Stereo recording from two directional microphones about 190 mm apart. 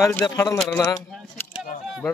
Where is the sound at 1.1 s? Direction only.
Centre (ahead or behind).